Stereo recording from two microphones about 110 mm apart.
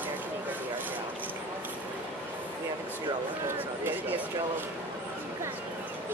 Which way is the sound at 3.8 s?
15° right (ahead or behind).